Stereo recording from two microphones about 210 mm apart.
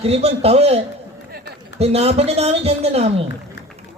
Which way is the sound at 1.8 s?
30° right (ahead or behind).